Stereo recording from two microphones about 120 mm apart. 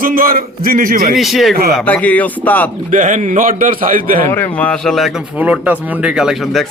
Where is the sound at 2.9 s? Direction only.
90° right.